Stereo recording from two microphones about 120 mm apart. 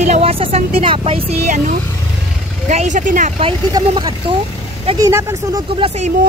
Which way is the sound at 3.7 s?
40° right (ahead or behind).